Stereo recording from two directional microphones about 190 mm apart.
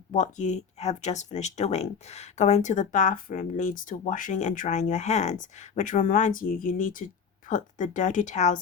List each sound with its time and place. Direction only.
0.1 s speech: 40° left (ahead or behind)